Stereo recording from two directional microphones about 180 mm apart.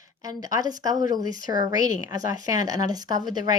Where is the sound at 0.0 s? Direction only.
20° right (ahead or behind).